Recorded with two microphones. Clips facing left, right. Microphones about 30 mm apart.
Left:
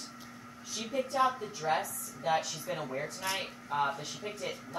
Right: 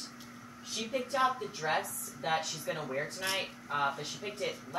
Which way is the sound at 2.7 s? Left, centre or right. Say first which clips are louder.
Even; right.